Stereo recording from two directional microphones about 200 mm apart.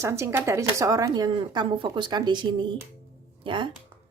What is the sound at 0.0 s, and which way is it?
Speech, 15° right (ahead or behind).